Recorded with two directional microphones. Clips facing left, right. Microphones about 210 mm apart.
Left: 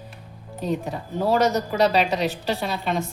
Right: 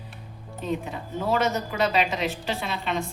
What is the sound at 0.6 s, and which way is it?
Speech, 40° left (ahead or behind).